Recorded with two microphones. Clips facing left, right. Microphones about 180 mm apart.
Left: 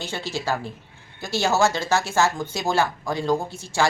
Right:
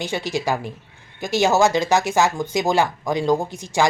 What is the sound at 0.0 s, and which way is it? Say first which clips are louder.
Speech: right 5 dB; 15° right (ahead or behind).